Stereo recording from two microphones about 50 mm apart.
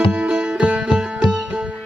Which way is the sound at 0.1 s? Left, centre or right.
Centre.